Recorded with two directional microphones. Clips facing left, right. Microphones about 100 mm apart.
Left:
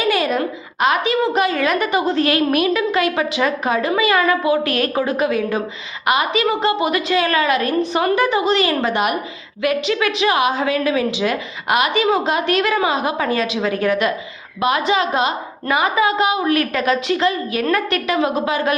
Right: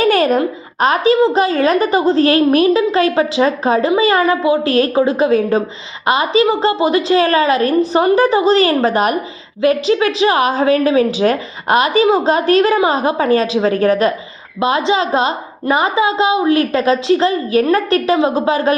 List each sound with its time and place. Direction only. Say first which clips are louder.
0.0 s a child's voice: right 6 dB; 45° right (ahead or behind)
14.6 s a woman's voice: right 3 dB; 30° right (ahead or behind)